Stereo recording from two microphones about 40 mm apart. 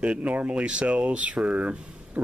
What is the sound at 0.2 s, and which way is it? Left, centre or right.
Speech, right.